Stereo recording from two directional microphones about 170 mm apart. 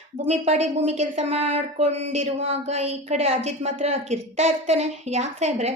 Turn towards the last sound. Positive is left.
turn(degrees=-40)  # may be behind; listen again after turning